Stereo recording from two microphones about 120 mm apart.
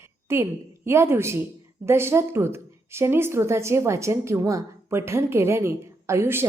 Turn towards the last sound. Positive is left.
turn(degrees=-20)  # may be behind; listen again after turning